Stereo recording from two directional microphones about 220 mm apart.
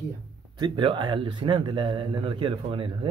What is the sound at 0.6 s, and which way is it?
A man's voice, 20° right (ahead or behind).